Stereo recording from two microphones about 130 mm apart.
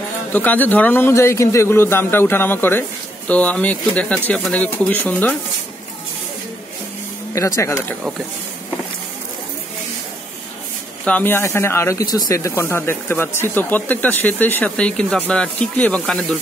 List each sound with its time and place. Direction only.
0.3 s speech: 15° left (ahead or behind)
7.3 s speech: 25° left (ahead or behind)
11.1 s speech: 15° left (ahead or behind)